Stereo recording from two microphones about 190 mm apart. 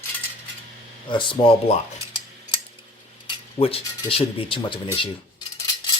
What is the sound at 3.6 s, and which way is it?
Speech, 30° left (ahead or behind).